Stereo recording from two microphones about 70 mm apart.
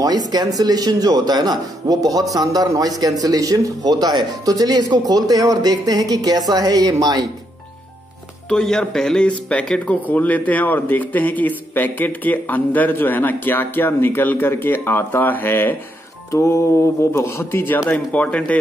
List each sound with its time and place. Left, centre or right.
0.0 s speech: right
8.5 s speech: centre; by 15.7 s left
16.3 s music: left
17.1 s a man's voice: left
17.8 s speech: left